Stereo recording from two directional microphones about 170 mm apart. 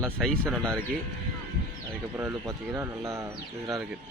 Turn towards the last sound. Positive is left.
turn(degrees=-15)  # may be behind; listen again after turning